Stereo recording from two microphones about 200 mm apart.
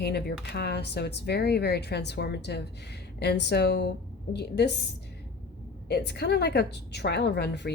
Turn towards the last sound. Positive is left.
turn(degrees=55)  # may be behind; listen again after turning